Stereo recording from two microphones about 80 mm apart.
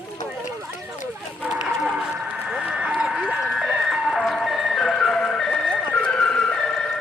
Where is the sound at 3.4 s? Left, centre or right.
Centre.